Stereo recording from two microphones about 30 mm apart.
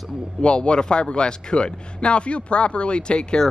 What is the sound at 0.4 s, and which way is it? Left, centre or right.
Speech, left.